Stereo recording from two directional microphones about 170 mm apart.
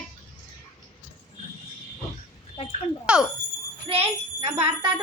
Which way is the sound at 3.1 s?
5° right (ahead or behind).